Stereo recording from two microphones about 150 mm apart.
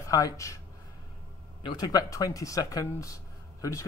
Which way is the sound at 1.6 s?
25° left (ahead or behind).